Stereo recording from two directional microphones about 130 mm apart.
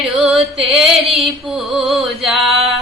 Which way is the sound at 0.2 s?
5° right (ahead or behind).